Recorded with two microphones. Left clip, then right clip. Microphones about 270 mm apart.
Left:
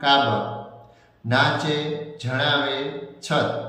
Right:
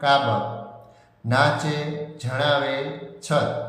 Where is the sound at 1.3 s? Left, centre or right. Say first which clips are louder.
Even; right.